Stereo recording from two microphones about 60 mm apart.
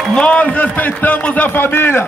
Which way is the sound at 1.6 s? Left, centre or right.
Left.